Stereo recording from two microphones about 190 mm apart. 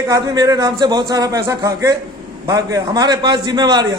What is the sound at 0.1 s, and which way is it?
A man's voice, 20° right (ahead or behind).